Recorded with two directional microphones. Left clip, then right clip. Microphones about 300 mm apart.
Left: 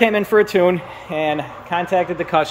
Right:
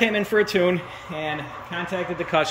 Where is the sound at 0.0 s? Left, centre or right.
Centre.